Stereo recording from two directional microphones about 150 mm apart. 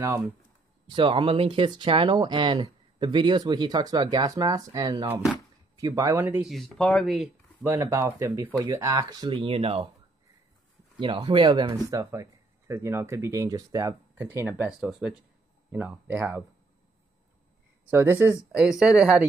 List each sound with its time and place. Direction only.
0.0 s speech: 20° right (ahead or behind)
0.8 s speech: 35° right (ahead or behind); by 6.5 s 10° right (ahead or behind)
6.5 s speech: 5° left (ahead or behind)
7.6 s speech: 20° right (ahead or behind); by 9.8 s 40° right (ahead or behind)
11.0 s speech: 35° right (ahead or behind); by 14.7 s 15° right (ahead or behind)
14.7 s speech: 5° right (ahead or behind)
17.8 s speech: 15° right (ahead or behind)
18.6 s speech: 5° right (ahead or behind)